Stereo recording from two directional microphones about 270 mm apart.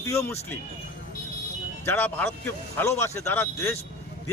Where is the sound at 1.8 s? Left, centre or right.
Centre.